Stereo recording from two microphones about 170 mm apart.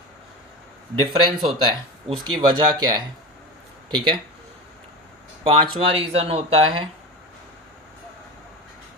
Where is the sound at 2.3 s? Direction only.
30° right (ahead or behind).